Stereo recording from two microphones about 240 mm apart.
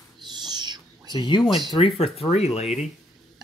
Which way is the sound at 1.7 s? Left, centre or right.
Left.